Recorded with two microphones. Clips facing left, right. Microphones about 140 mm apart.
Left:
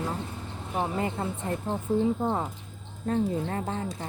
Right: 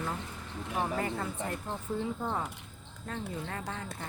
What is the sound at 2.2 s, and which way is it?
Speech, 30° left (ahead or behind).